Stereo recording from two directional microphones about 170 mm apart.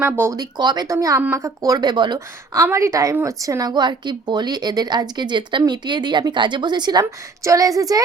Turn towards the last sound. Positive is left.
turn(degrees=-20)  # may be behind; listen again after turning